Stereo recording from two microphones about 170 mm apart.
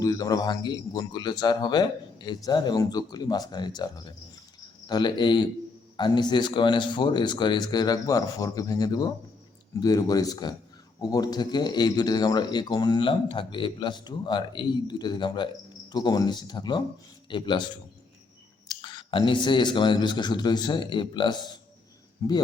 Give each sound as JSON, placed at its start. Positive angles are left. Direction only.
{"t": 0.0, "sound": "speech", "side_deg": 20}
{"t": 18.7, "sound": "a man's voice", "side_deg": 30}